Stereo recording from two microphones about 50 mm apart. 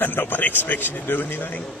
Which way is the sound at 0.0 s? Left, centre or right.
Left.